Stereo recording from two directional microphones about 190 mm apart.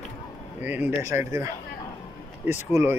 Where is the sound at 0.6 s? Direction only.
10° right (ahead or behind).